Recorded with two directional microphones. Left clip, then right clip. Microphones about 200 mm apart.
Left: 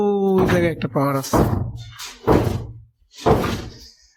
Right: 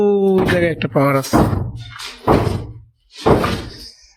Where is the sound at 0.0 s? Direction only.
10° left (ahead or behind).